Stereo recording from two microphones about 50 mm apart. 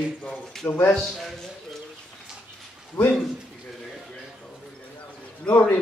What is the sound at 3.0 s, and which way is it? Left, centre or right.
Speech, left.